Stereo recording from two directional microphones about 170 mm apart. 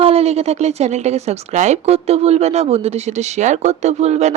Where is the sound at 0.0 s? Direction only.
35° right (ahead or behind).